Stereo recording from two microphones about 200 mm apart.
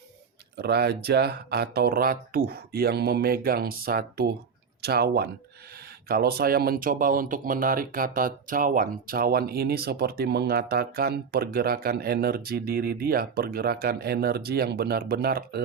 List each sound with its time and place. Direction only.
0.5 s speech: 55° right (ahead or behind)